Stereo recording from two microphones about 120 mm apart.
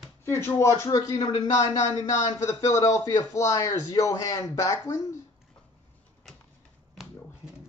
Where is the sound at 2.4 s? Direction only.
25° left (ahead or behind).